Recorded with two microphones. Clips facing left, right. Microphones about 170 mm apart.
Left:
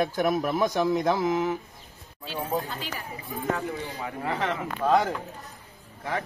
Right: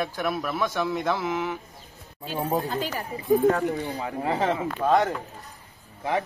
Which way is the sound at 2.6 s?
40° right (ahead or behind).